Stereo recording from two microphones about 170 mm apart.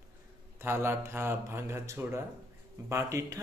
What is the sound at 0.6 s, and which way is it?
Speech, 15° right (ahead or behind).